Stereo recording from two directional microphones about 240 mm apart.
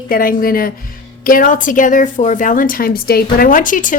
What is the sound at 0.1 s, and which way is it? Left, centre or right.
A woman's voice, left.